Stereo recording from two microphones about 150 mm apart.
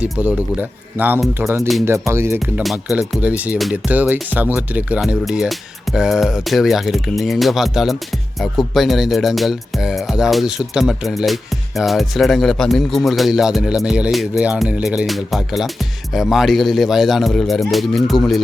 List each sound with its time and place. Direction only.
0.0 s speech: 10° right (ahead or behind)
2.6 s speech: 5° right (ahead or behind)